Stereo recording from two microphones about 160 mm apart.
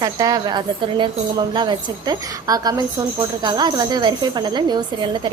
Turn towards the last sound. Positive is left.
turn(degrees=-30)  # may be behind; listen again after turning